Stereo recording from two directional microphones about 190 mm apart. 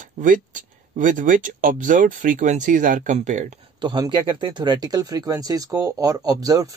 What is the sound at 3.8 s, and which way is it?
Speech, 25° right (ahead or behind).